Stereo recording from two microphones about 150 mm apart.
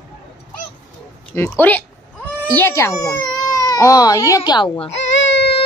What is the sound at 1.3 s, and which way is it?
Cat, 15° left (ahead or behind).